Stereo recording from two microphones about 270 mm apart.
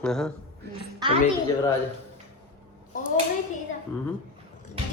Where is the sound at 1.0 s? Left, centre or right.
Centre.